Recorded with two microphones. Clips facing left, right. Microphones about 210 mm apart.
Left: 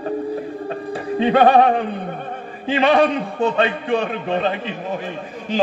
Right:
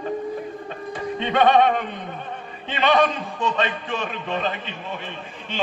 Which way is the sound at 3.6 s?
35° left (ahead or behind).